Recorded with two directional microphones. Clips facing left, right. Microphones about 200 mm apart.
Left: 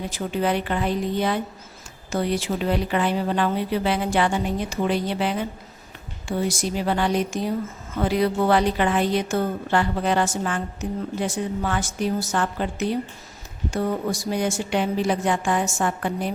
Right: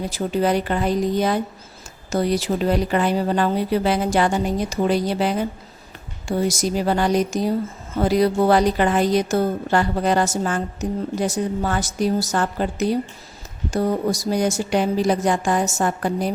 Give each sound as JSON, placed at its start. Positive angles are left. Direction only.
{"t": 0.1, "sound": "a woman's voice", "side_deg": -40}